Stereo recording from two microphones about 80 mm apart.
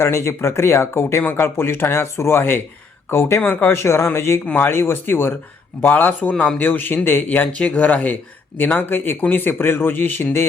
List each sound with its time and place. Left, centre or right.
0.0 s speech: left